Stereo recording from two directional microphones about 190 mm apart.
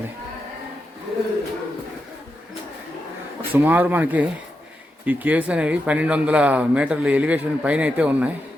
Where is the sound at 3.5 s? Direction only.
10° right (ahead or behind).